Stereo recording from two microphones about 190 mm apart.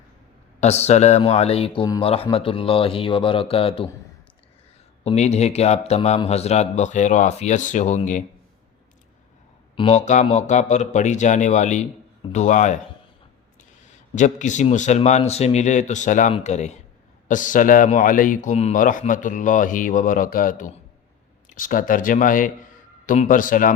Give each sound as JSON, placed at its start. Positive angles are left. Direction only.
{"t": 0.6, "sound": "speech", "side_deg": 35}
{"t": 5.0, "sound": "speech", "side_deg": 35}
{"t": 9.7, "sound": "speech", "side_deg": 35}
{"t": 14.2, "sound": "speech", "side_deg": 40}